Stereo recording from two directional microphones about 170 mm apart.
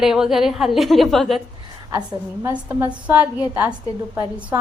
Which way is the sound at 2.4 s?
15° right (ahead or behind).